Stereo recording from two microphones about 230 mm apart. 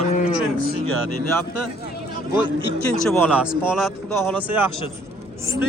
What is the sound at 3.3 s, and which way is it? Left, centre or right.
Speech, centre.